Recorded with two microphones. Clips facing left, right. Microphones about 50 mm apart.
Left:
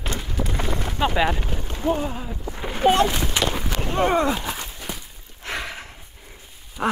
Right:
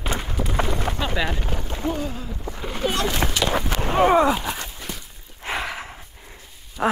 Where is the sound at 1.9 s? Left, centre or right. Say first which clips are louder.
Left 3 dB; left.